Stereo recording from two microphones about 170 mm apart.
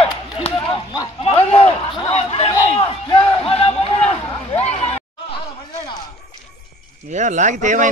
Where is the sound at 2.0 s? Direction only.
35° left (ahead or behind).